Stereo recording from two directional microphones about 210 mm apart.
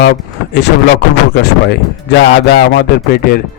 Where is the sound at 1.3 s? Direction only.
55° left (ahead or behind).